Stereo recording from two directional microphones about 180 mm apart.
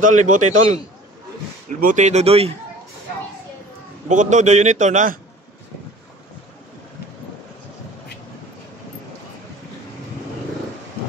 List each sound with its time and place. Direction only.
0.0 s a man's voice: 45° right (ahead or behind)
4.1 s a man's voice: 45° right (ahead or behind)